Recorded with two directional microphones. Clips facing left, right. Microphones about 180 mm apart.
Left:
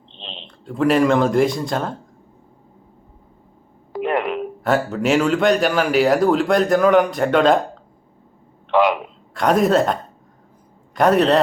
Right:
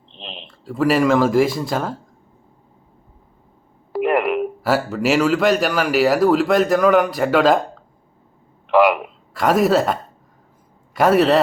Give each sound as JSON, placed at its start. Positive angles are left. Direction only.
{"t": 0.2, "sound": "speech", "side_deg": -5}
{"t": 3.9, "sound": "a man's voice", "side_deg": -5}
{"t": 8.7, "sound": "a man's voice", "side_deg": -5}